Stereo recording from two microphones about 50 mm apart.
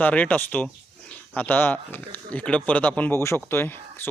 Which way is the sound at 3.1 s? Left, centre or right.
Left.